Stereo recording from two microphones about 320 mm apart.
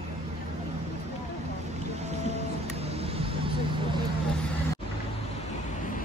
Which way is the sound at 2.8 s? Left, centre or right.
Centre.